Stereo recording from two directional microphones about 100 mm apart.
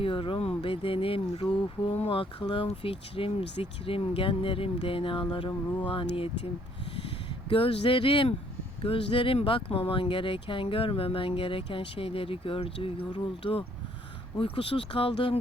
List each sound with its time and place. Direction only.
0.0 s speech: 60° left (ahead or behind)
7.5 s speech: 65° left (ahead or behind)
13.1 s speech: 55° left (ahead or behind)